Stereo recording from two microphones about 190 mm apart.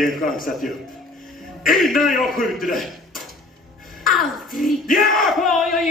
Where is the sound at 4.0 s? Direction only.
45° left (ahead or behind).